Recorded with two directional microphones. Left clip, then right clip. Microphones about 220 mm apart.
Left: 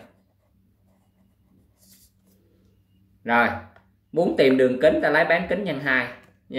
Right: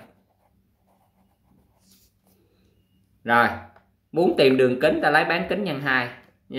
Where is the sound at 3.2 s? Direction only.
20° right (ahead or behind).